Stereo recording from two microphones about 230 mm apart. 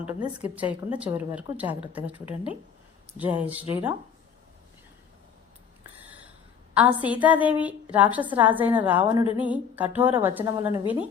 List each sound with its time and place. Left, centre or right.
0.1 s a woman's voice: centre
0.4 s a woman's voice: centre
6.7 s a woman's voice: centre